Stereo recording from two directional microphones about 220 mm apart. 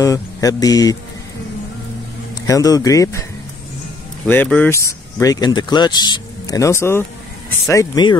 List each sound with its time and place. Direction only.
0.0 s speech: 15° left (ahead or behind)
2.4 s speech: 15° left (ahead or behind)
4.3 s speech: 5° left (ahead or behind)